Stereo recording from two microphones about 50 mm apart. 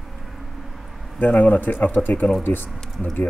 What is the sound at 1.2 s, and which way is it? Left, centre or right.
Speech, left.